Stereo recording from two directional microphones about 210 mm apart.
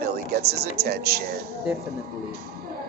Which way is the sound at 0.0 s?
50° right (ahead or behind).